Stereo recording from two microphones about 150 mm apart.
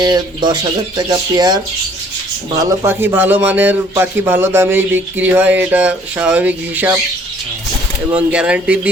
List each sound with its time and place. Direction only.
0.0 s speech: 25° right (ahead or behind)
2.8 s a man's voice: 15° right (ahead or behind)
8.1 s a man's voice: 5° right (ahead or behind)